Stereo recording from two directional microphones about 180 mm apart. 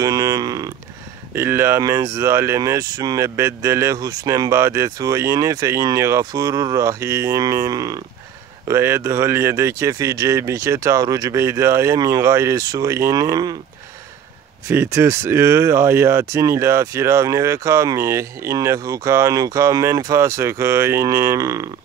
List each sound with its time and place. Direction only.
0.0 s a sound: 20° right (ahead or behind)
1.3 s speech: 15° right (ahead or behind)
14.7 s speech: 15° right (ahead or behind)